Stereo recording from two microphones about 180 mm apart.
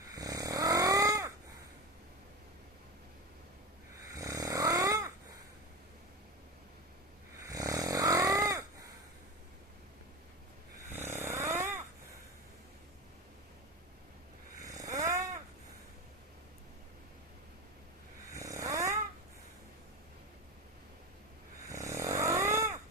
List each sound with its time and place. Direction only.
0.1 s snoring: 20° right (ahead or behind)
4.1 s snoring: 20° right (ahead or behind)
7.4 s snoring: 20° right (ahead or behind)
11.2 s snoring: 15° right (ahead or behind)
14.8 s a sound: 15° right (ahead or behind)
18.3 s snoring: 20° right (ahead or behind)
21.7 s snoring: 15° right (ahead or behind)